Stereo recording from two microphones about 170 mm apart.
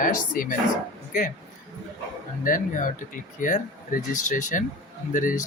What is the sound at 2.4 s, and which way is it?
Speech, 50° left (ahead or behind).